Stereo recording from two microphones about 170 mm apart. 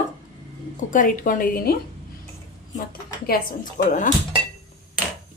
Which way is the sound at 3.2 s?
60° left (ahead or behind).